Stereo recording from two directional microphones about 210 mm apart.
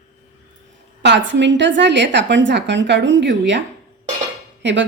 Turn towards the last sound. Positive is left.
turn(degrees=-60)  # may be behind; listen again after turning